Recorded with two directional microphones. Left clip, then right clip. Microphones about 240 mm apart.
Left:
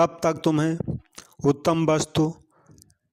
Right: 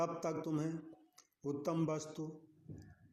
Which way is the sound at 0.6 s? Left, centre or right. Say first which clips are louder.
Left 16 dB; left.